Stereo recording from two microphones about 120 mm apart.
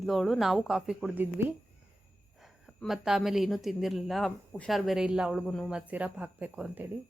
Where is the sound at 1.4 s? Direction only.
20° right (ahead or behind).